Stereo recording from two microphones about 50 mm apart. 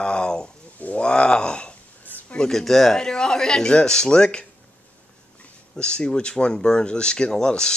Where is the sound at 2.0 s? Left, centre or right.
Left.